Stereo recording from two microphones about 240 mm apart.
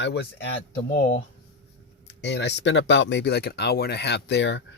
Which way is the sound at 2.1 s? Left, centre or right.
Left.